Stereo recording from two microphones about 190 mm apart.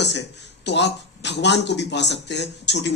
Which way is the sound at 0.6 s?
65° left (ahead or behind).